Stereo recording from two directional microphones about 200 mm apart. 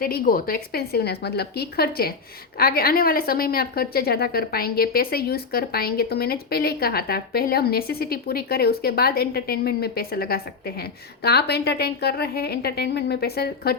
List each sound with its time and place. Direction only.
0.0 s a woman's voice: 45° left (ahead or behind)